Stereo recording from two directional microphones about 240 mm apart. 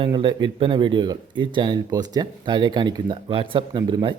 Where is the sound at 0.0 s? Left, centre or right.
Right.